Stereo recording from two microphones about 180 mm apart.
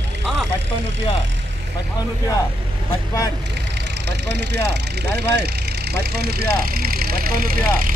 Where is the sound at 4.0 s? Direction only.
70° right (ahead or behind); by 7.9 s 55° right (ahead or behind).